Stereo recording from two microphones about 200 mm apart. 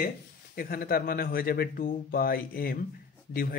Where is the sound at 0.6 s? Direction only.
45° left (ahead or behind).